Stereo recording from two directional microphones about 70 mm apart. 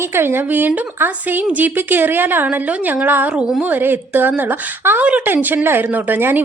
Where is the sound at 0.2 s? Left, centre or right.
Right.